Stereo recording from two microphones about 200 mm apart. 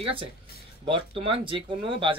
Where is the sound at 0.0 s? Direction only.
25° right (ahead or behind).